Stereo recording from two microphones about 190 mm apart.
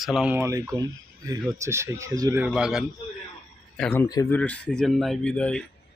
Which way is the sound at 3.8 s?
10° left (ahead or behind).